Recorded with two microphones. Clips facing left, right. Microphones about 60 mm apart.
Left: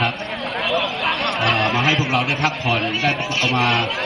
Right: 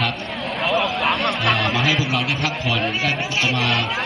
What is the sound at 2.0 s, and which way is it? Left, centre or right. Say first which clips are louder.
A man's voice: left 3 dB; left.